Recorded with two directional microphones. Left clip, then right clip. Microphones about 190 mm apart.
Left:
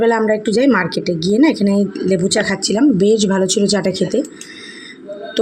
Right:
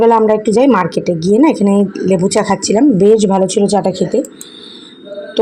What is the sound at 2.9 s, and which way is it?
Speech, 5° right (ahead or behind).